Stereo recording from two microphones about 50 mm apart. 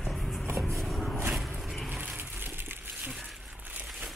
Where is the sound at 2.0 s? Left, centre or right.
Right.